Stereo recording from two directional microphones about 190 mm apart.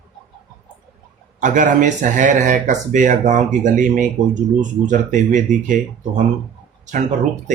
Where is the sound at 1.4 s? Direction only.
40° right (ahead or behind).